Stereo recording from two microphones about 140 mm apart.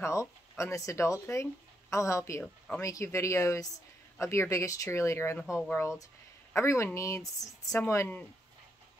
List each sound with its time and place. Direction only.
0.0 s speech: 20° left (ahead or behind)